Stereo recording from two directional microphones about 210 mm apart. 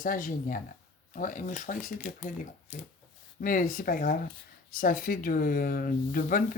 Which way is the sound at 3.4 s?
40° left (ahead or behind).